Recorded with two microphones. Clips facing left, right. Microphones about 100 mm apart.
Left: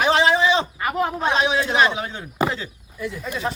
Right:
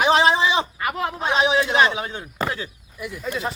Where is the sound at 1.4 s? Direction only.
20° right (ahead or behind).